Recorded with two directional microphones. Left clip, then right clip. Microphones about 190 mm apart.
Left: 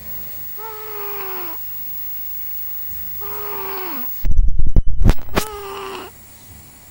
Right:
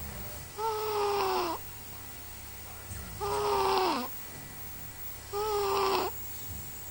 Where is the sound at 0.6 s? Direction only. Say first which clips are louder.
Right 3 dB; 20° right (ahead or behind).